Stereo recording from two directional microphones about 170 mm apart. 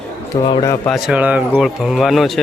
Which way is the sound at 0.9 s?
Centre (ahead or behind).